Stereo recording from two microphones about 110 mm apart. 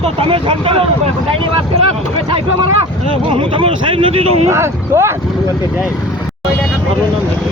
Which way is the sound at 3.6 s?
50° right (ahead or behind).